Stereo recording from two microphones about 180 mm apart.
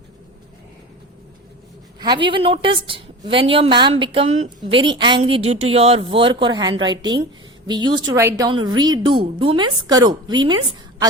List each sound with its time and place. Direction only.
2.0 s a woman's voice: 25° right (ahead or behind)